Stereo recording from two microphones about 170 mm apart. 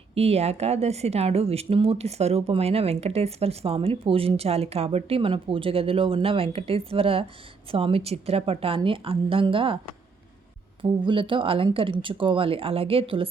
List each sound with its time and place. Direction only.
0.1 s speech: 35° right (ahead or behind)
10.8 s speech: 30° right (ahead or behind)